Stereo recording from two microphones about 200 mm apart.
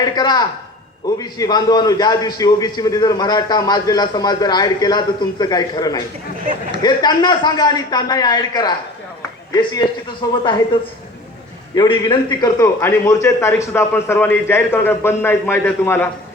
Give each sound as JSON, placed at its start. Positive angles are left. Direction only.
{"t": 0.0, "sound": "a man's voice", "side_deg": 20}
{"t": 11.7, "sound": "a man's voice", "side_deg": 25}